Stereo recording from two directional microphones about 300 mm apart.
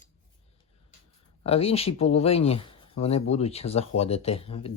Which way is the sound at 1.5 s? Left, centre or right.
Centre.